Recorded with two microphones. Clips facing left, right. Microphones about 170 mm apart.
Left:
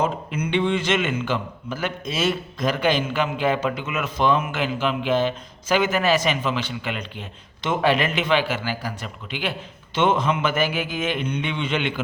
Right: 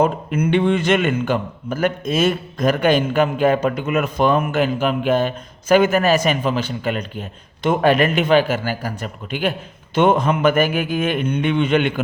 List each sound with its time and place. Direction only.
0.0 s a man's voice: 55° right (ahead or behind)